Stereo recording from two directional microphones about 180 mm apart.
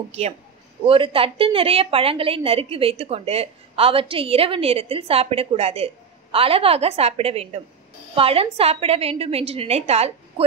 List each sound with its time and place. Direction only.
0.8 s a woman's voice: 30° right (ahead or behind)